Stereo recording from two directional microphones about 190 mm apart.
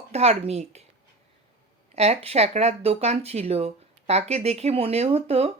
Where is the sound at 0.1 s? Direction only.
35° right (ahead or behind).